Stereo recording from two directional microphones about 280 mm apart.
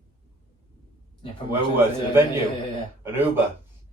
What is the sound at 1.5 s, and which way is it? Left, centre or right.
Speech, centre.